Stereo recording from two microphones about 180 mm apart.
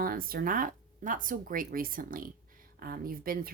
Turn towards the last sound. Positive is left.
turn(degrees=-55)  # may be behind; listen again after turning